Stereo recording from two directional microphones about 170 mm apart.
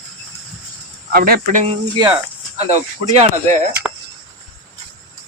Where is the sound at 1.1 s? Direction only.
60° right (ahead or behind).